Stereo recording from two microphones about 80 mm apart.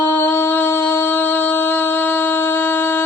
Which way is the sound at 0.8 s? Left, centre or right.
Left.